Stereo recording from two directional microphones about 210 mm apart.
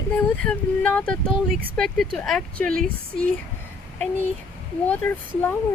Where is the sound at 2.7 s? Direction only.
45° right (ahead or behind).